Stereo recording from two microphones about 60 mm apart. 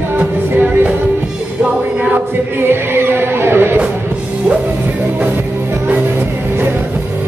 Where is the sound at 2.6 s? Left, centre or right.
Right.